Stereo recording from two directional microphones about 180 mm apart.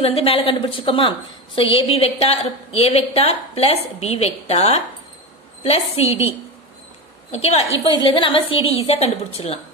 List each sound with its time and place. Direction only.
0.0 s a woman's voice: 30° left (ahead or behind)